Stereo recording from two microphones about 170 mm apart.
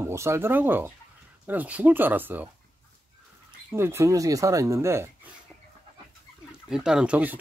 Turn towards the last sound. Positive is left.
turn(degrees=-10)  # may be behind; listen again after turning